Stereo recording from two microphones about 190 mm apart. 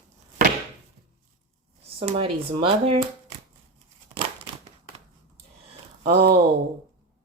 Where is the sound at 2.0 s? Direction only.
30° right (ahead or behind).